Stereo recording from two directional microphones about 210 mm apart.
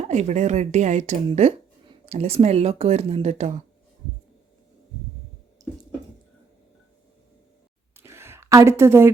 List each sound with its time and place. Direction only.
0.1 s speech: 35° right (ahead or behind)
5.6 s water: 15° right (ahead or behind)
7.9 s a sound: 10° right (ahead or behind)